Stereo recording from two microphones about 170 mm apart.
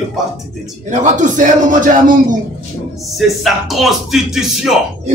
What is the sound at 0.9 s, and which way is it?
A man's voice, 45° right (ahead or behind).